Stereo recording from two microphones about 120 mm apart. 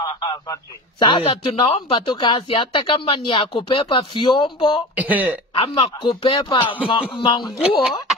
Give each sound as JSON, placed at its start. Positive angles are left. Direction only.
{"t": 0.0, "sound": "a man's voice", "side_deg": 35}
{"t": 4.9, "sound": "speech", "side_deg": -15}
{"t": 5.5, "sound": "a man's voice", "side_deg": 45}
{"t": 7.4, "sound": "a woman's voice", "side_deg": -5}